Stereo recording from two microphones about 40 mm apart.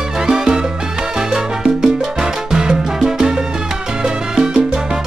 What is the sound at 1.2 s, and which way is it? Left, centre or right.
Salsa music, centre.